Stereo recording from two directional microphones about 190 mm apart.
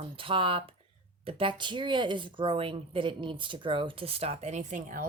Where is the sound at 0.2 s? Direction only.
30° right (ahead or behind).